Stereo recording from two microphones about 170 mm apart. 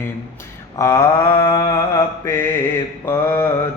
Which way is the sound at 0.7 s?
20° left (ahead or behind).